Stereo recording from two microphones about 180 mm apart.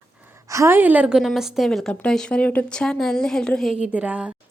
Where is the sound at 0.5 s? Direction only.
15° right (ahead or behind); by 3.8 s 5° left (ahead or behind).